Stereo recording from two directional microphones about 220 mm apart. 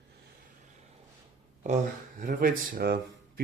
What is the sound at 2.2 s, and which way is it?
Speech, 40° right (ahead or behind).